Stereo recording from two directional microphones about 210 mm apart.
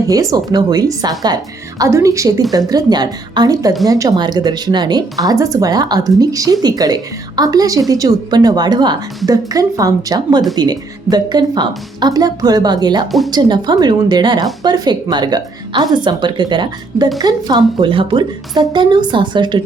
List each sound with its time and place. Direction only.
0.1 s a woman's voice: 15° right (ahead or behind)
13.1 s speech: centre (ahead or behind)
13.3 s a woman's voice: 20° right (ahead or behind)